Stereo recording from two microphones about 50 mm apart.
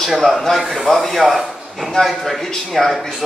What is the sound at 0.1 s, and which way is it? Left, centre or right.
Speech, centre.